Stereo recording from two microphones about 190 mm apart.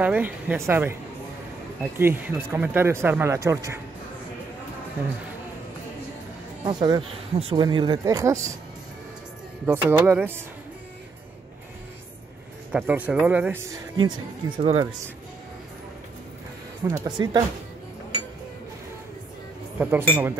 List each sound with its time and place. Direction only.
0.0 s speech: 10° right (ahead or behind)
6.6 s speech: 20° right (ahead or behind)
9.7 s speech: 10° right (ahead or behind)
12.7 s speech: 10° right (ahead or behind)
13.9 s speech: 25° right (ahead or behind)
16.8 s speech: 20° right (ahead or behind)
19.8 s speech: 10° right (ahead or behind)